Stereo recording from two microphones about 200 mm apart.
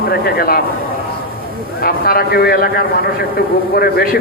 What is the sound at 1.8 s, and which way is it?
A man's voice, 50° left (ahead or behind).